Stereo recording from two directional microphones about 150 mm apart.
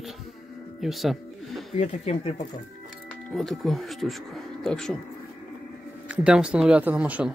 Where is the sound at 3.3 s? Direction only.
5° left (ahead or behind).